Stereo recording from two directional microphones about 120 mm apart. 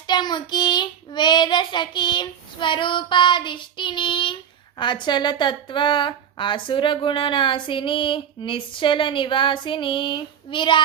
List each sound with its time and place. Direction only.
0.1 s child singing: 35° left (ahead or behind)
4.8 s a woman's voice: 40° left (ahead or behind)